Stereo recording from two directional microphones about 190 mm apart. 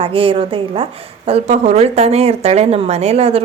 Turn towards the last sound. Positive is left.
turn(degrees=-30)  # may be behind; listen again after turning